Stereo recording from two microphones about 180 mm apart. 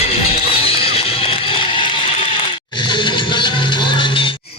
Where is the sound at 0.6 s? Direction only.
30° left (ahead or behind).